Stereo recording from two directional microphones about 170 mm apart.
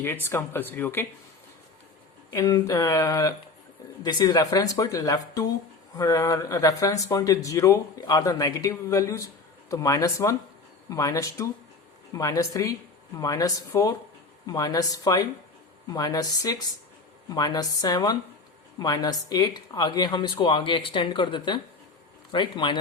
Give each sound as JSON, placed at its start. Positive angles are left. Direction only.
{"t": 0.0, "sound": "speech", "side_deg": 15}
{"t": 2.3, "sound": "speech", "side_deg": 20}